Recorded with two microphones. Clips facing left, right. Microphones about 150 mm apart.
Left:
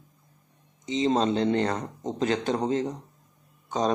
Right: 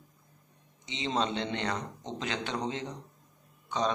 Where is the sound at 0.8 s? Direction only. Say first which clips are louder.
Left 8 dB; 40° left (ahead or behind).